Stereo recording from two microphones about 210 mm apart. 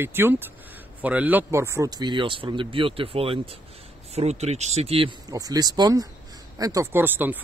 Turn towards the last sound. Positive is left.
turn(degrees=-10)  # may be behind; listen again after turning